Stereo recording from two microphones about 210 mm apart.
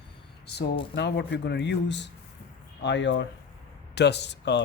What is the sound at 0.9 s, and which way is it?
Speech, 55° left (ahead or behind).